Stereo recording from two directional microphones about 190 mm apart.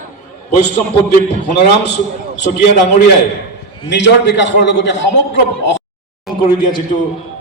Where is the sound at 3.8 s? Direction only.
70° left (ahead or behind).